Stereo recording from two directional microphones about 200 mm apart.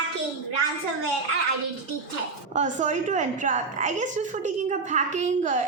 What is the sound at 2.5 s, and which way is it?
A woman's voice, 35° right (ahead or behind).